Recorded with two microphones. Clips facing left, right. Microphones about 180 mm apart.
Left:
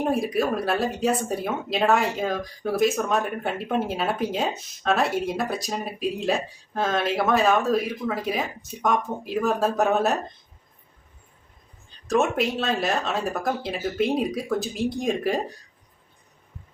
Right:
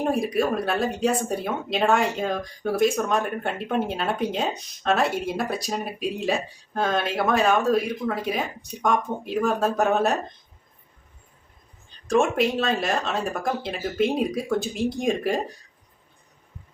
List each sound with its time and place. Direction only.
0.0 s speech: centre (ahead or behind)
12.0 s speech: centre (ahead or behind)